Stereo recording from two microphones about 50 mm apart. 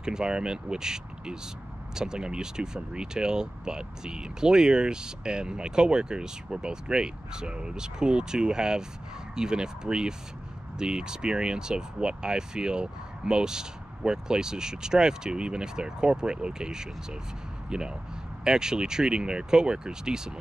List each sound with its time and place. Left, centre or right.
0.0 s speech: centre